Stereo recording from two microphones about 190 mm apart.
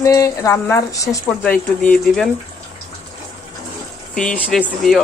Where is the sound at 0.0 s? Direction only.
15° left (ahead or behind).